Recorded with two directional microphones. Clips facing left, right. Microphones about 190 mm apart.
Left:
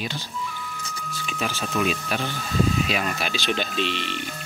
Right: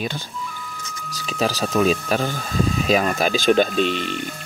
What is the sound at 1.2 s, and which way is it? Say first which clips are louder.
Speech: right 7 dB; 35° right (ahead or behind).